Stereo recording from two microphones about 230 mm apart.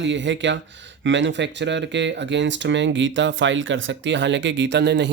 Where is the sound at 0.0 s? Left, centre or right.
Right.